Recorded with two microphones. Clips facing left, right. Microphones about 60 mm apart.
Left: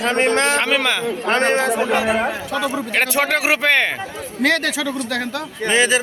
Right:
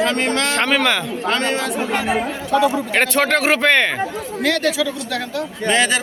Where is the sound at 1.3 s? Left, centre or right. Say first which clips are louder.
Left 4 dB; left.